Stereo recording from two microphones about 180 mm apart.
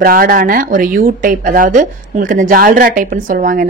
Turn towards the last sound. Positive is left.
turn(degrees=-50)  # may be behind; listen again after turning